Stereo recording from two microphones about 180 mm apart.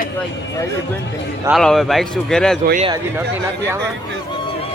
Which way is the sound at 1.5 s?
Centre (ahead or behind).